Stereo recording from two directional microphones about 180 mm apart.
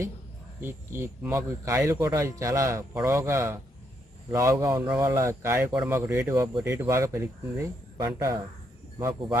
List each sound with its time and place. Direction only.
0.6 s a man's voice: 15° right (ahead or behind)